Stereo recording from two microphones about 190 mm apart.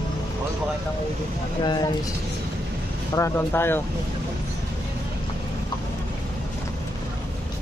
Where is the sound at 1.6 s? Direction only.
25° left (ahead or behind).